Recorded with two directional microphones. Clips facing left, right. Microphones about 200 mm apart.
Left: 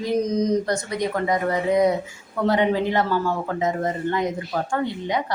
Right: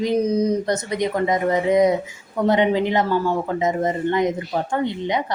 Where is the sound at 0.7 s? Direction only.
20° right (ahead or behind).